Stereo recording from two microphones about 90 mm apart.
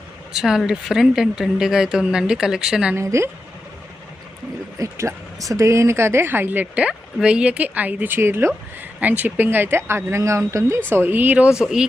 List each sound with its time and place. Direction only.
0.3 s speech: 5° right (ahead or behind)
2.9 s a woman's voice: 30° right (ahead or behind)
4.8 s speech: 35° right (ahead or behind); by 11.4 s 20° right (ahead or behind)
11.6 s speech: 10° right (ahead or behind)